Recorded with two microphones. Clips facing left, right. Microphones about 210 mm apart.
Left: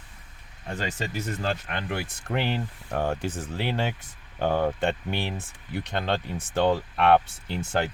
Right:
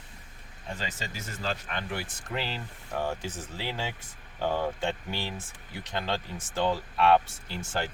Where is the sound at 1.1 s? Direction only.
55° left (ahead or behind).